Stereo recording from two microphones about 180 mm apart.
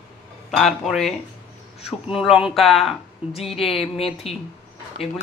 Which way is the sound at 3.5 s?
30° left (ahead or behind).